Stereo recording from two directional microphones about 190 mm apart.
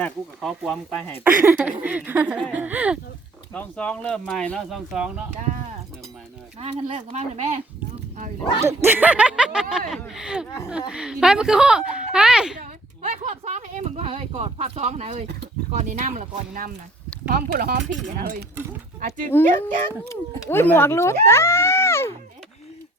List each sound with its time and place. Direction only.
0.0 s a woman's voice: centre (ahead or behind)
1.2 s speech: 10° right (ahead or behind)
3.5 s a woman's voice: 5° left (ahead or behind)
6.6 s speech: 30° right (ahead or behind)
8.6 s a woman's voice: 10° right (ahead or behind)
12.5 s speech: 40° right (ahead or behind)
17.2 s speech: 55° right (ahead or behind)
20.1 s speech: 10° left (ahead or behind)